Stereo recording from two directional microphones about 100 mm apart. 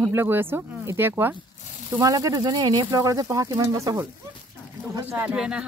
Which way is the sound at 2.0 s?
35° right (ahead or behind).